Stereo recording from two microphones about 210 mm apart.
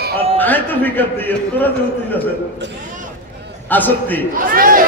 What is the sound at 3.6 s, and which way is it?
Speech, 10° left (ahead or behind).